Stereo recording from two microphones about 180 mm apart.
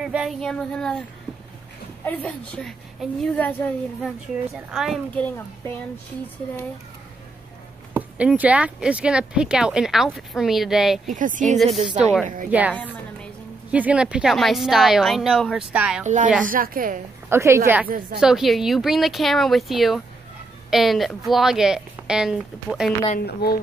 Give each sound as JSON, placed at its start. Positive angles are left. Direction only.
{"t": 0.0, "sound": "speech", "side_deg": -5}
{"t": 2.0, "sound": "a woman's voice", "side_deg": 10}
{"t": 7.9, "sound": "speech", "side_deg": -10}
{"t": 11.1, "sound": "a woman's voice", "side_deg": -45}
{"t": 11.4, "sound": "a woman's voice", "side_deg": 0}
{"t": 16.4, "sound": "a woman's voice", "side_deg": -50}
{"t": 17.3, "sound": "a woman's voice", "side_deg": -15}
{"t": 18.2, "sound": "speech", "side_deg": 0}
{"t": 23.1, "sound": "a woman's voice", "side_deg": 60}